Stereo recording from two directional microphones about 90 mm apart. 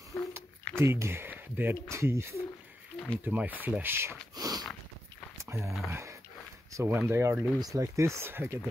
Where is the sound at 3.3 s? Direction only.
15° right (ahead or behind).